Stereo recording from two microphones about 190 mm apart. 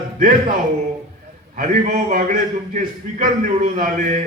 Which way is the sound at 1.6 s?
40° right (ahead or behind).